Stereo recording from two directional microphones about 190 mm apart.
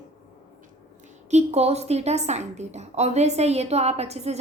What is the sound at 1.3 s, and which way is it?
A woman's voice, 35° right (ahead or behind).